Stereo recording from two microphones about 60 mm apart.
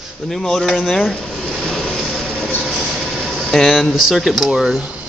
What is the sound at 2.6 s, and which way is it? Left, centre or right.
Train, centre.